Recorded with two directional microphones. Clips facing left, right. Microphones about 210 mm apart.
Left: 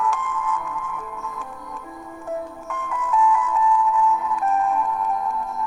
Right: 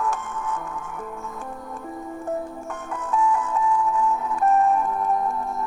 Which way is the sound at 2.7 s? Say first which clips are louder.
Left 4 dB; 40° right (ahead or behind).